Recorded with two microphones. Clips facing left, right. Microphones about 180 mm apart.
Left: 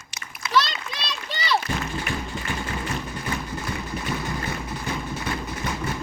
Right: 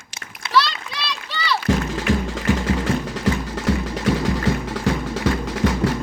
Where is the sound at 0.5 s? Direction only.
45° left (ahead or behind).